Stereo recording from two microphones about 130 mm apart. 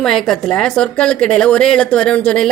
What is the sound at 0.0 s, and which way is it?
Speech, 5° left (ahead or behind).